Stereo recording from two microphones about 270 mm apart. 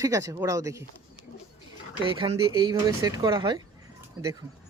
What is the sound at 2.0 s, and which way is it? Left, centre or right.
A man's voice, centre.